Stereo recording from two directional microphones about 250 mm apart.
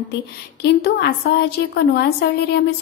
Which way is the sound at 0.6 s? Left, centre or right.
Left.